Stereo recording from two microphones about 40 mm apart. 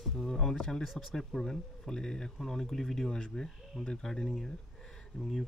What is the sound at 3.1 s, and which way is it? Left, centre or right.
Speech, centre.